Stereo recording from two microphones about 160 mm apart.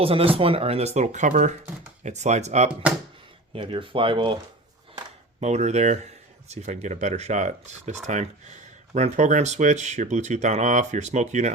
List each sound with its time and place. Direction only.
0.0 s speech: 35° right (ahead or behind)
3.5 s speech: 35° right (ahead or behind)
5.4 s speech: 45° right (ahead or behind)